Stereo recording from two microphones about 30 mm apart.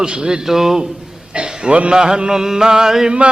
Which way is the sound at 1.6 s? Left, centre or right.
Right.